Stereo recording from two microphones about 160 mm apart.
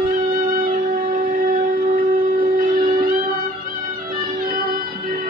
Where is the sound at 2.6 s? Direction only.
60° right (ahead or behind).